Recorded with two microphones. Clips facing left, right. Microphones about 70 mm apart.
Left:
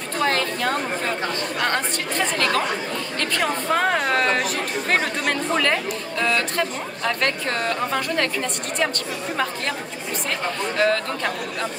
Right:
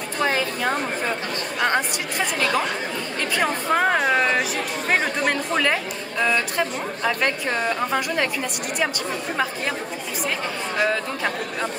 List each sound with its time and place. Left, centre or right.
0.2 s speech: centre
10.8 s speech: centre